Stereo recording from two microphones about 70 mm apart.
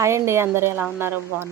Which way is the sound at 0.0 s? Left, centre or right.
Right.